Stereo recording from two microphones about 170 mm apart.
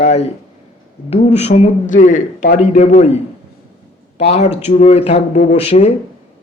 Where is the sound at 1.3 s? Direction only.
40° left (ahead or behind).